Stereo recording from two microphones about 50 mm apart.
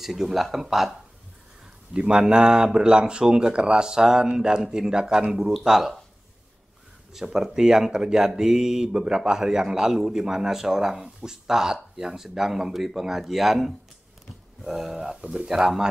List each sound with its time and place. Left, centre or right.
0.0 s speech: centre
2.0 s a man's voice: centre
7.1 s a man's voice: centre